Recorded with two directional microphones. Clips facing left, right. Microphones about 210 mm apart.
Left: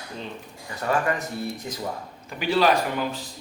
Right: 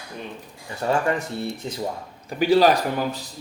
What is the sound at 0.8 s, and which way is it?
Speech, 30° right (ahead or behind).